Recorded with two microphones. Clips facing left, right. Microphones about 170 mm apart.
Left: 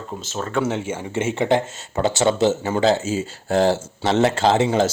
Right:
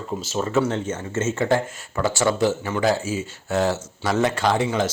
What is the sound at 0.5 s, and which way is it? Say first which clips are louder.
Speech: left 1 dB; 10° left (ahead or behind).